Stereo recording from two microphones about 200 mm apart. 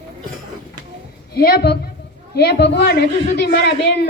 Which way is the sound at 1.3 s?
50° left (ahead or behind).